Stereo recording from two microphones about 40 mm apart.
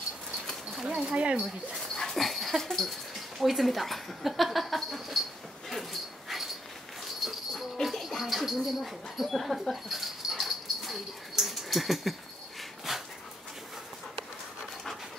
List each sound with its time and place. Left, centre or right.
0.8 s speech: right
2.1 s dog: centre
3.3 s speech: centre
5.7 s dog: centre
7.8 s music: centre
8.2 s speech: centre